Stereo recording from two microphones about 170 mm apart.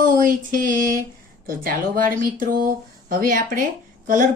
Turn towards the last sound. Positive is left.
turn(degrees=-50)  # may be behind; listen again after turning